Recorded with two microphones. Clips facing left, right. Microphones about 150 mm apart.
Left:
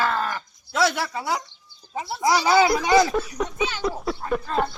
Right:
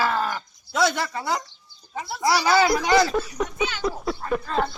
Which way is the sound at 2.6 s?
5° left (ahead or behind).